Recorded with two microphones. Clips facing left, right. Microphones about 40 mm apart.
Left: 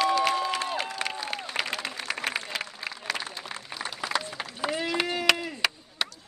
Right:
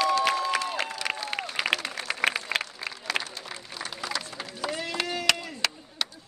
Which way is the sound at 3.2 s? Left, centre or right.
Left.